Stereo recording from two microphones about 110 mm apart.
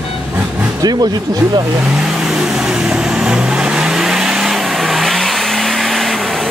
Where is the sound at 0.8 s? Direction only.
40° right (ahead or behind).